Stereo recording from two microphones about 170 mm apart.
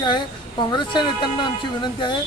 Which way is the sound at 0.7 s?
25° left (ahead or behind).